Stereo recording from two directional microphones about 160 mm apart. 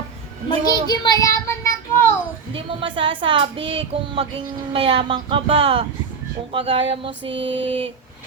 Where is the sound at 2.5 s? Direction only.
35° right (ahead or behind).